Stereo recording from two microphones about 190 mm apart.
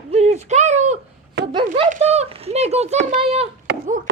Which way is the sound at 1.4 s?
65° right (ahead or behind).